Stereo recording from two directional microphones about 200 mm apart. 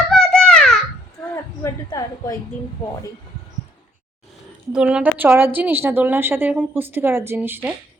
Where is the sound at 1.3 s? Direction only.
15° left (ahead or behind).